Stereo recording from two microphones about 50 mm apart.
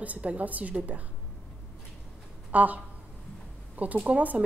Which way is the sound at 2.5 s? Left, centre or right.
Right.